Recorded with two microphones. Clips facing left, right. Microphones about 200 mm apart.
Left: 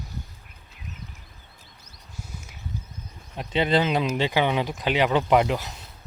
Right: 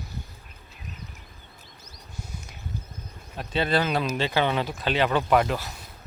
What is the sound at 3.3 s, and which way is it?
Speech, 20° left (ahead or behind).